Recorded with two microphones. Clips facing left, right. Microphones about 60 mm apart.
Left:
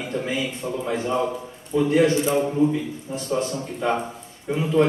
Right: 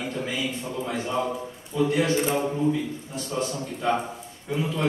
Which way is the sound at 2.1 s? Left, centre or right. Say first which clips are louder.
Left 3 dB; right.